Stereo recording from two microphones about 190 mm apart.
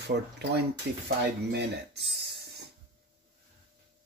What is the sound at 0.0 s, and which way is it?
Speech, 65° right (ahead or behind).